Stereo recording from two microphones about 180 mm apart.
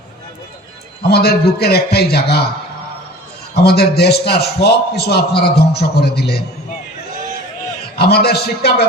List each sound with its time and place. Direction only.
1.0 s a man's voice: 60° left (ahead or behind)
3.5 s a man's voice: 65° left (ahead or behind)
7.9 s a man's voice: 60° left (ahead or behind)